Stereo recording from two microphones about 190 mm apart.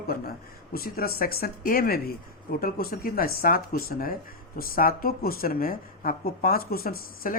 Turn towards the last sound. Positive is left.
turn(degrees=50)  # may be behind; listen again after turning